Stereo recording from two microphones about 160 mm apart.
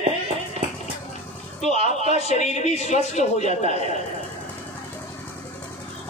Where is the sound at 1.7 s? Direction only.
45° left (ahead or behind).